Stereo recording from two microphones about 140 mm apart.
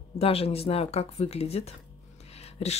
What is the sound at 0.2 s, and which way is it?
Speech, 45° left (ahead or behind).